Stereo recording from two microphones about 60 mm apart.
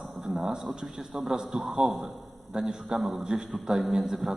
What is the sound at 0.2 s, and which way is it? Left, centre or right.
A man's voice, centre.